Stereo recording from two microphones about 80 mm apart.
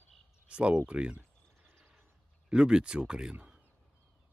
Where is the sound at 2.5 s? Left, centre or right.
Centre.